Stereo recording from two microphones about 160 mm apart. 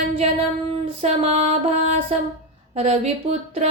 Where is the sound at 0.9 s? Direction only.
40° right (ahead or behind).